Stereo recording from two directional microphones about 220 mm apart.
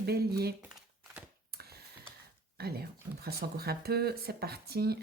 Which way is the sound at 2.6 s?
45° right (ahead or behind).